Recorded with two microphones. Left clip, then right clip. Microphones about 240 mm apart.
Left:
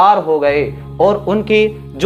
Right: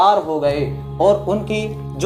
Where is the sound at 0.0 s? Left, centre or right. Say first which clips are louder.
Left 4 dB; left.